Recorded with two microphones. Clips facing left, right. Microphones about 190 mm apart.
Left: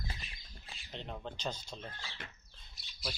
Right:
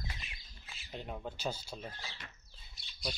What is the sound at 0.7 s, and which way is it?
Speech, 5° right (ahead or behind).